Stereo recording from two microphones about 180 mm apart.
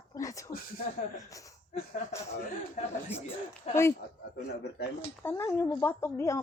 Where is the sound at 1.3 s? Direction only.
20° left (ahead or behind).